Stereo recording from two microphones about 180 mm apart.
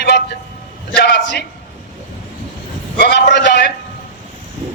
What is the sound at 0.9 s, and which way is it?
Speech, 70° left (ahead or behind).